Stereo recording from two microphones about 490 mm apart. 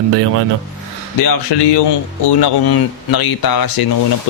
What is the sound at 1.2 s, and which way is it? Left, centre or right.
Speech, left.